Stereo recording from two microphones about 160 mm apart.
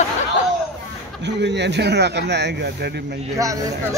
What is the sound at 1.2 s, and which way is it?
Speech, 90° right.